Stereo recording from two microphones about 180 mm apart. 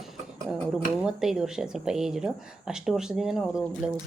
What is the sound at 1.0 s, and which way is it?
Speech, 5° right (ahead or behind).